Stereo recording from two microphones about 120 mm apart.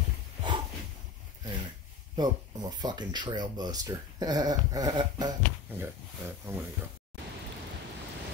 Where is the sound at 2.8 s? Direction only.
35° right (ahead or behind).